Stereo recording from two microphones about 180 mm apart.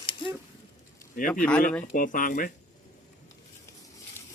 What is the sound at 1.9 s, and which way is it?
Speech, 50° left (ahead or behind).